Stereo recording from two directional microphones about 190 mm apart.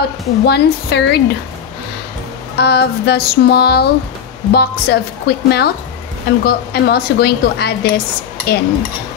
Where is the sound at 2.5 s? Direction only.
60° left (ahead or behind).